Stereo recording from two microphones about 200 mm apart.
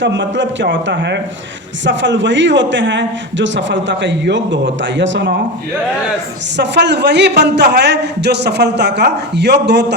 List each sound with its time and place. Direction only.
0.0 s a man's voice: 65° right (ahead or behind)
6.6 s a man's voice: 60° right (ahead or behind)